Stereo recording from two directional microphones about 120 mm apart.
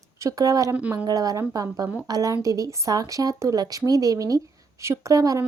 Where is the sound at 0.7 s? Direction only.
10° right (ahead or behind).